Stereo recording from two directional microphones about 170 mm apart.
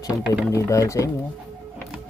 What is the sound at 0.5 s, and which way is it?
Speech, 20° left (ahead or behind).